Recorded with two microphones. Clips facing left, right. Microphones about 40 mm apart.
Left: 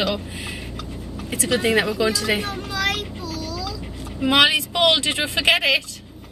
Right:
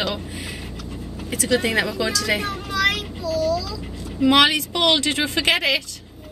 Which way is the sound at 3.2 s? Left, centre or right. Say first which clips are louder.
Right 7 dB; left.